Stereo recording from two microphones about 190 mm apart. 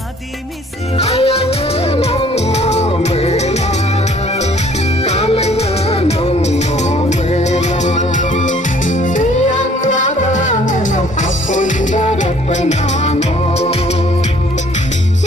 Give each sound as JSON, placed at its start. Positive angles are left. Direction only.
{"t": 0.9, "sound": "music", "side_deg": 35}
{"t": 5.0, "sound": "music", "side_deg": 35}